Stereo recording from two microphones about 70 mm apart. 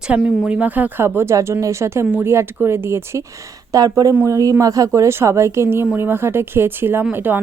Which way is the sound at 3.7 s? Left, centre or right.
Right.